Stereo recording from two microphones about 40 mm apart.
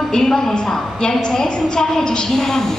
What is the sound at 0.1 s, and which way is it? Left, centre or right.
Speech, centre.